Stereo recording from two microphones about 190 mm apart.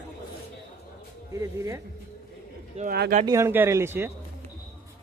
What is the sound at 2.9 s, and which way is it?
Speech, 55° right (ahead or behind).